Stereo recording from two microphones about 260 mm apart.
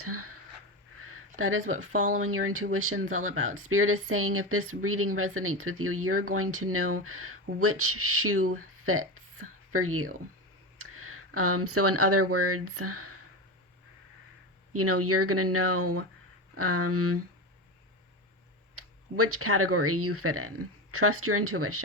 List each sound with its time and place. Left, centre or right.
0.0 s speech: right
0.9 s a sound: right
1.4 s speech: right
14.7 s speech: right
18.8 s speech: right